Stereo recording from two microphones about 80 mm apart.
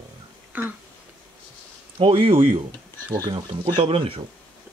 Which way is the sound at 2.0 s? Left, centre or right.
Right.